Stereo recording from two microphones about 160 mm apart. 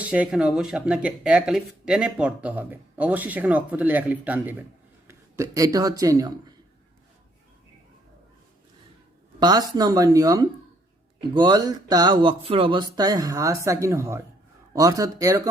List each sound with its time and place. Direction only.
0.1 s speech: 5° right (ahead or behind)
9.4 s speech: 25° right (ahead or behind)